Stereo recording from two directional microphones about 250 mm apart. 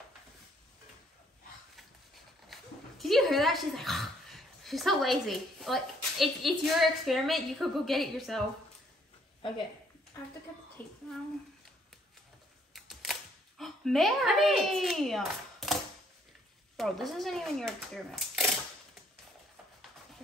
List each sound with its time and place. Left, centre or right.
2.4 s speech: centre
10.8 s a child's voice: centre
12.7 s camera: centre
16.7 s speech: centre